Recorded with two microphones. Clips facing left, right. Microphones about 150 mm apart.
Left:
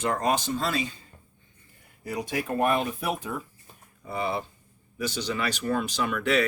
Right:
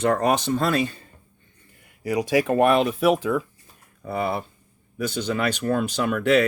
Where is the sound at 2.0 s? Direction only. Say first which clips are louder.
Right 9 dB; 80° right.